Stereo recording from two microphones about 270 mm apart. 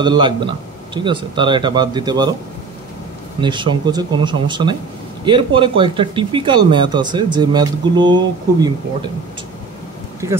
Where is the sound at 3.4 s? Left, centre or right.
Centre.